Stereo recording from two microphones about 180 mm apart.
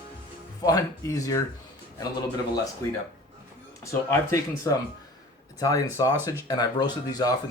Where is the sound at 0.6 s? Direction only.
20° left (ahead or behind).